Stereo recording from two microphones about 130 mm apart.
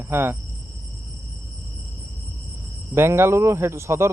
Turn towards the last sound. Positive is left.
turn(degrees=-20)  # may be behind; listen again after turning